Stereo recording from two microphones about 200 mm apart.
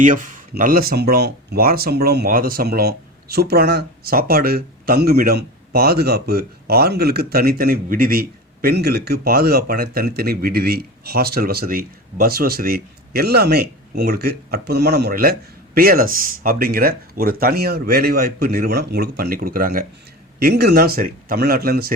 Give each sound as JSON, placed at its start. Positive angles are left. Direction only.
{"t": 0.0, "sound": "speech", "side_deg": -40}